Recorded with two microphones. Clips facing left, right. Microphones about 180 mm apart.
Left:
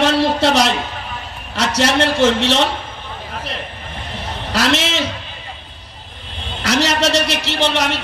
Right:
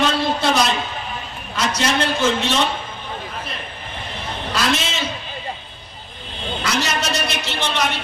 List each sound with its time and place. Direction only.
0.0 s a sound: 80° left
1.6 s a man's voice: 85° left
4.5 s a man's voice: 75° left (ahead or behind)
6.6 s a man's voice: 85° left